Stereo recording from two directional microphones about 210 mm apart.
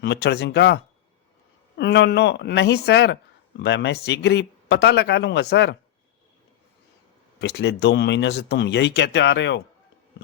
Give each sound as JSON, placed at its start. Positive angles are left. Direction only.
{"t": 0.0, "sound": "speech", "side_deg": 55}
{"t": 7.4, "sound": "speech", "side_deg": 50}